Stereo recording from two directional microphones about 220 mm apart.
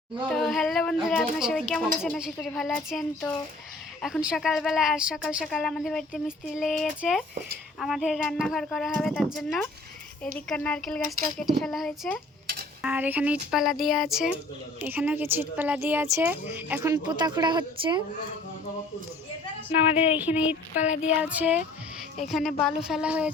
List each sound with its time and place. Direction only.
0.3 s a woman's voice: centre (ahead or behind); by 18.0 s 20° right (ahead or behind)
20.1 s a woman's voice: 5° right (ahead or behind)